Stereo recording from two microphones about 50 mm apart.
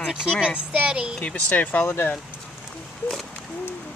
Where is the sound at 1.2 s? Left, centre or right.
Left.